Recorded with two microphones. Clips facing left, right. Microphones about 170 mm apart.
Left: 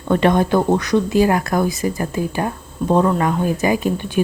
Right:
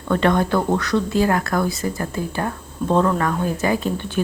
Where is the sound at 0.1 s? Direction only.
20° left (ahead or behind).